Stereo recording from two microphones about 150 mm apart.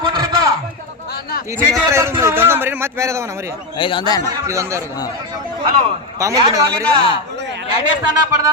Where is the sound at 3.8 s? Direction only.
35° left (ahead or behind).